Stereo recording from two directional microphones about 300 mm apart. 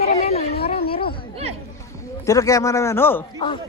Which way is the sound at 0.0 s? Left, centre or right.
Left.